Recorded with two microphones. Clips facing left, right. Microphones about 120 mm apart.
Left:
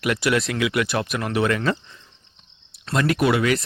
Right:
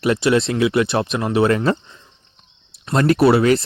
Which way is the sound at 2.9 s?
35° right (ahead or behind).